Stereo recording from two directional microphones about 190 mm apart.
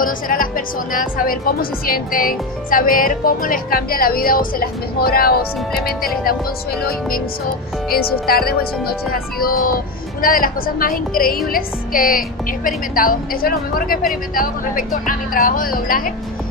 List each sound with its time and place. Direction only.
0.0 s speech: 50° left (ahead or behind)
6.8 s speech: 55° left (ahead or behind)